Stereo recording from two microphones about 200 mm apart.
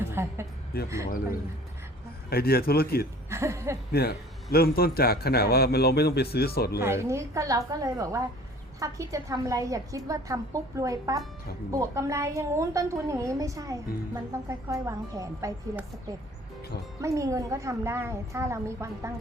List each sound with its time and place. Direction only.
0.0 s music: 10° right (ahead or behind)
0.7 s a man's voice: 50° left (ahead or behind)
2.3 s a man's voice: 50° left (ahead or behind)
3.2 s a woman's voice: 15° right (ahead or behind)
3.9 s a man's voice: 55° left (ahead or behind)
6.8 s a woman's voice: 15° right (ahead or behind)
17.0 s a woman's voice: 15° right (ahead or behind)